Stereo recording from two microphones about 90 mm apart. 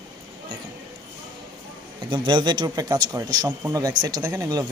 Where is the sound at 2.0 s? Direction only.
60° right (ahead or behind).